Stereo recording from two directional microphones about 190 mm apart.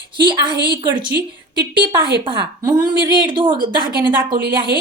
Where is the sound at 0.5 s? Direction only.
60° right (ahead or behind).